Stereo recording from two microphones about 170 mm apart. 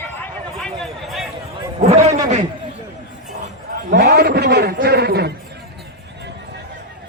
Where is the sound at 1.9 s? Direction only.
40° right (ahead or behind).